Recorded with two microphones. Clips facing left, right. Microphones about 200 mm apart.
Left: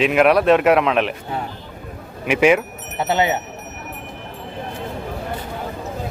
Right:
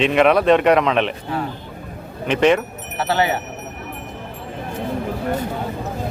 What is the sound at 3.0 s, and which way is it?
Speech, 20° left (ahead or behind).